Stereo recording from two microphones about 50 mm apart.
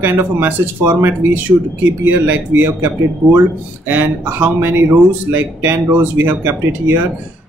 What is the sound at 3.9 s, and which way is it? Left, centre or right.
Speech, right.